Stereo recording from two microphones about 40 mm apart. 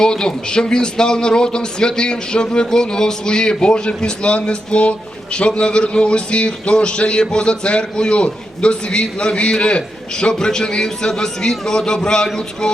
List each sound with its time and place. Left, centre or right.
0.0 s a man's voice: centre